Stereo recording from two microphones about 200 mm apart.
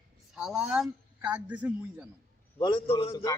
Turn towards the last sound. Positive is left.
turn(degrees=25)  # may be behind; listen again after turning